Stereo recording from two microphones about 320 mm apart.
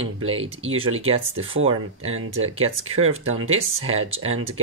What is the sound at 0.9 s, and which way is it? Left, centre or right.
Speech, right.